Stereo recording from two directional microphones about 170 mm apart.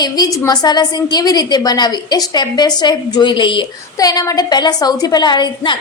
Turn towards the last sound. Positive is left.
turn(degrees=25)  # may be behind; listen again after turning